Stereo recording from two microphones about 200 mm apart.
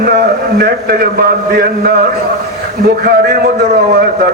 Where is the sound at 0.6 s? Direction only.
50° right (ahead or behind).